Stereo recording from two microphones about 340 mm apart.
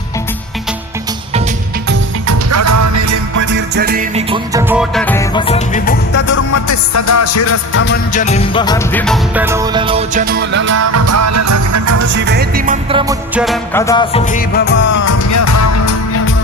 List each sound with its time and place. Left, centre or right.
1.9 s music: right
3.5 s music: right
4.7 s music: centre; by 6.3 s left
6.3 s music: left
8.1 s music: centre; by 12.0 s right
12.0 s music: right; by 14.8 s left
14.9 s music: left